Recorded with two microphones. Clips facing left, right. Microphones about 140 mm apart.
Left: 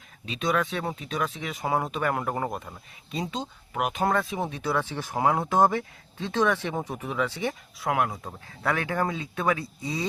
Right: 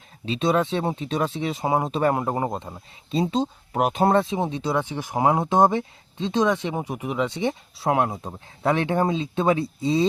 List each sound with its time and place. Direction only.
0.3 s speech: 30° right (ahead or behind)